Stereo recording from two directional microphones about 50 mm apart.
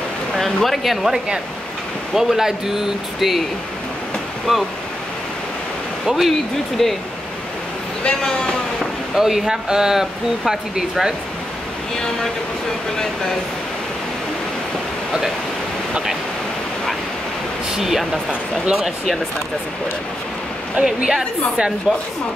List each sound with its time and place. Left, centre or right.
0.4 s speech: centre
4.5 s speech: centre
6.0 s speech: centre
8.0 s speech: centre
9.1 s speech: centre
17.7 s speech: centre
20.8 s speech: centre